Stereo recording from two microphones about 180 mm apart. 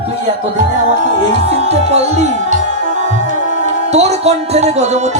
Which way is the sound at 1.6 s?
35° right (ahead or behind).